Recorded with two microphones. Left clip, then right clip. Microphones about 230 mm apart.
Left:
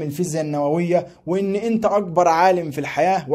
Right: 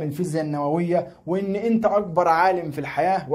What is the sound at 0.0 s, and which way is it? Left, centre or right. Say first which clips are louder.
A man's voice: left 2 dB; left.